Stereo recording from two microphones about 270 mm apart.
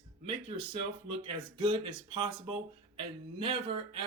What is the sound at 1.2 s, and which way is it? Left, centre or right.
Speech, centre.